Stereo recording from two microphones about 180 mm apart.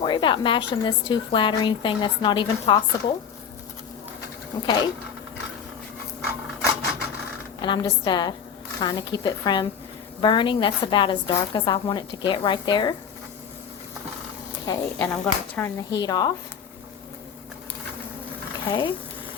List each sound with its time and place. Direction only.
0.0 s a woman's voice: 25° left (ahead or behind)
4.6 s a woman's voice: 25° left (ahead or behind)
7.6 s a woman's voice: 25° left (ahead or behind)
14.7 s speech: 15° left (ahead or behind)
15.9 s a woman's voice: 20° left (ahead or behind)
18.7 s a woman's voice: 25° left (ahead or behind)